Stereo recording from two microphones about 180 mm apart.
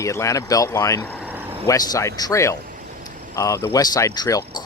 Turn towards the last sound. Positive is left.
turn(degrees=20)  # may be behind; listen again after turning